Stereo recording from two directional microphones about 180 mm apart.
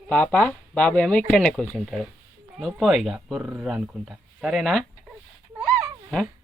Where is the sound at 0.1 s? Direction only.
5° left (ahead or behind).